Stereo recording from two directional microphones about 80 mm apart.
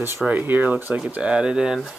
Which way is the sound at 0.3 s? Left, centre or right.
Right.